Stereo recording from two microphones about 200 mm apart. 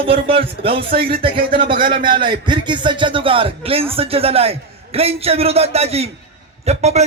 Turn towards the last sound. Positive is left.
turn(degrees=-35)  # may be behind; listen again after turning